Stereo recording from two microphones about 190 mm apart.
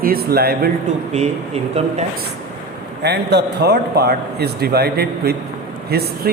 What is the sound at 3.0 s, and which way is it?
A man's voice, 60° right (ahead or behind).